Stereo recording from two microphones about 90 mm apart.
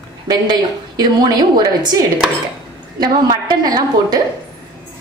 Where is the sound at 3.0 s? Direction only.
50° right (ahead or behind).